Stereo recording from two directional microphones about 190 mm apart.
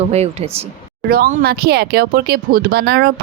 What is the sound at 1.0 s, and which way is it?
Speech, 50° right (ahead or behind).